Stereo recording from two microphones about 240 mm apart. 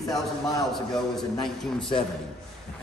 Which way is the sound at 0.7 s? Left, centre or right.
Centre.